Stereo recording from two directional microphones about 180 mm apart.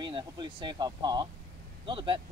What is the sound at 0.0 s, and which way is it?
Speech, 25° right (ahead or behind).